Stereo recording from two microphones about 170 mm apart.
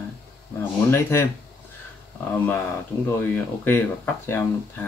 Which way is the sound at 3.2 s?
10° left (ahead or behind).